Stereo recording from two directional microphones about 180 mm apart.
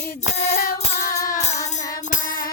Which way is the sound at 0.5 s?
50° left (ahead or behind).